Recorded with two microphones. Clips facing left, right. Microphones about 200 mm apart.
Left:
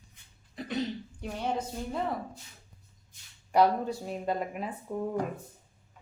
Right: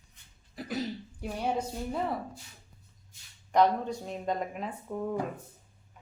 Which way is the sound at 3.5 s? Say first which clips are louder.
Left 1 dB; 10° left (ahead or behind).